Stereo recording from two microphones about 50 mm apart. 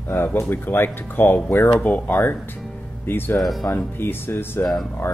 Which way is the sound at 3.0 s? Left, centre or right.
Left.